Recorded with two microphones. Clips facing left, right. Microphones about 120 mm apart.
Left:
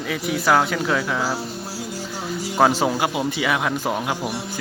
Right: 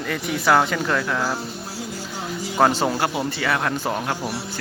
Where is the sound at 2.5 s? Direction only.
5° left (ahead or behind).